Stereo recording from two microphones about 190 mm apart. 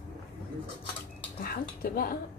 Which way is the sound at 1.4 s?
50° left (ahead or behind).